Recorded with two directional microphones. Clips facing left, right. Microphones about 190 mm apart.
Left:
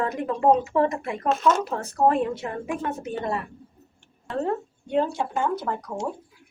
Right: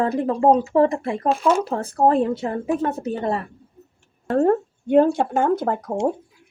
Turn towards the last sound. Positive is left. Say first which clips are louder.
# right 6 dB
turn(degrees=-50)  # may be behind; listen again after turning